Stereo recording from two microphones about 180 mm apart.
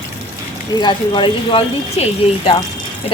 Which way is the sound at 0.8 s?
25° left (ahead or behind).